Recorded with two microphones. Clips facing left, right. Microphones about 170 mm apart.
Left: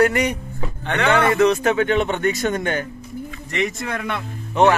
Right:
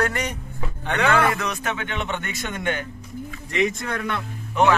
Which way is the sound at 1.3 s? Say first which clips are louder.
Left 11 dB; 30° left (ahead or behind).